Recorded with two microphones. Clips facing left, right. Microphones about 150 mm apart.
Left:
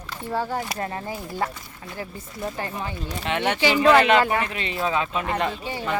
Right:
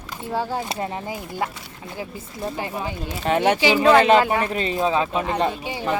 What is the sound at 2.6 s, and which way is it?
A woman's voice, 15° right (ahead or behind).